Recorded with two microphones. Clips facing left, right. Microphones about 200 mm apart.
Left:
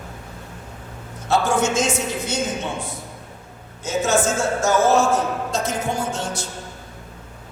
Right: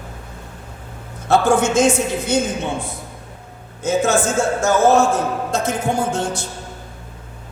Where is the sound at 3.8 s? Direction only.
55° right (ahead or behind).